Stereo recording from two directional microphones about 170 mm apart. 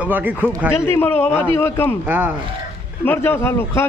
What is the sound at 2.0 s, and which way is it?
Speech, 10° right (ahead or behind).